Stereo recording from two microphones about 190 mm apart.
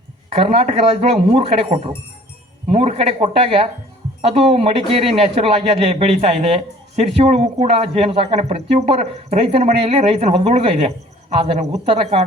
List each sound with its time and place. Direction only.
0.3 s speech: 30° right (ahead or behind)